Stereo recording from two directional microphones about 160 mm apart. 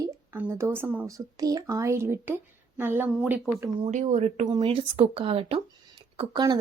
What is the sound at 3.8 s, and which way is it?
Speech, 45° right (ahead or behind).